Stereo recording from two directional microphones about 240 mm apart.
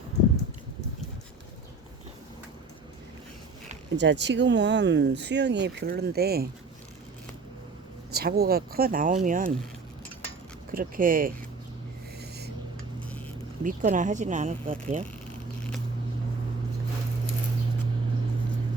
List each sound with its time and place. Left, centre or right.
3.9 s speech: right
8.1 s speech: right
10.7 s speech: right
13.7 s speech: right